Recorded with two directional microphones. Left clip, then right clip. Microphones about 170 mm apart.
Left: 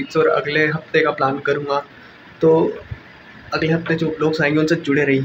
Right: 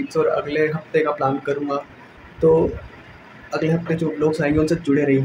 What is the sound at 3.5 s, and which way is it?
Speech, 15° right (ahead or behind).